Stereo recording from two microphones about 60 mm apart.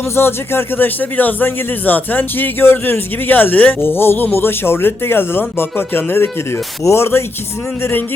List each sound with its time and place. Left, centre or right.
0.2 s a man's voice: left
3.8 s a man's voice: left